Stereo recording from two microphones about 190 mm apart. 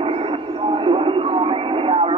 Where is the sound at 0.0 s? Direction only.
30° right (ahead or behind).